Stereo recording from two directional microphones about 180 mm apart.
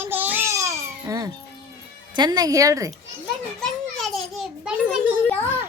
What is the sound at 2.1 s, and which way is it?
Speech, 25° right (ahead or behind).